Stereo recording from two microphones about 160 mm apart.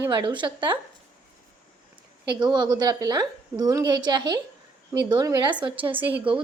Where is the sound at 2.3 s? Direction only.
25° right (ahead or behind).